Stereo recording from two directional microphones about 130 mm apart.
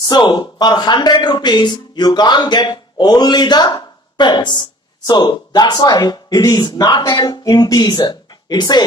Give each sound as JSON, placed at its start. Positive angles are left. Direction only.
{"t": 0.0, "sound": "speech", "side_deg": 35}